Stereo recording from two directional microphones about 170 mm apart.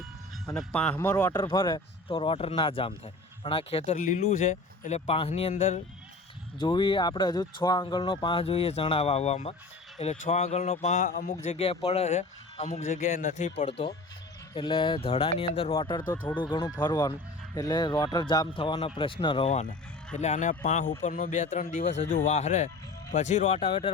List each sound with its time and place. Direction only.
0.5 s speech: 5° left (ahead or behind)
1.5 s speech: 25° left (ahead or behind)
3.9 s speech: 55° left (ahead or behind)
4.2 s speech: 40° left (ahead or behind)
11.5 s speech: 35° left (ahead or behind)
13.7 s speech: 35° left (ahead or behind)
23.6 s speech: 30° left (ahead or behind)